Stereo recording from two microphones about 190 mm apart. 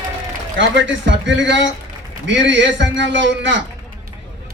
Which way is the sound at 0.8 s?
70° right (ahead or behind).